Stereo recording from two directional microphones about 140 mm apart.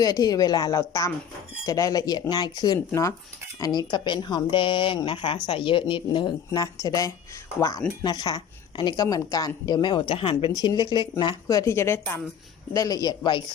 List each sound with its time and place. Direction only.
0.0 s a woman's voice: 25° left (ahead or behind)